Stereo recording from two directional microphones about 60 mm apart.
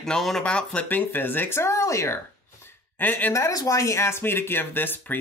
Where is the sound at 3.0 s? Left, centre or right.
Left.